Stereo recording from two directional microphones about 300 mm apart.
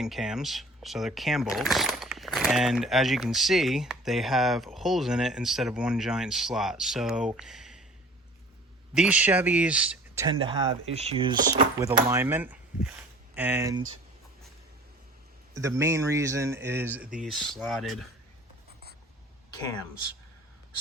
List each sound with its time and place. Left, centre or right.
0.0 s speech: centre
9.0 s speech: centre
10.2 s speech: centre
15.5 s speech: centre